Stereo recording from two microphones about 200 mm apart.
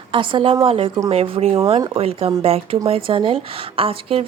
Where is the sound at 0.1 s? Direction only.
25° right (ahead or behind).